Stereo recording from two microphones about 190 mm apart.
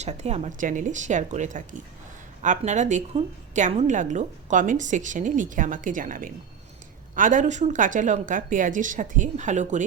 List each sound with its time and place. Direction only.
0.0 s a woman's voice: 35° right (ahead or behind)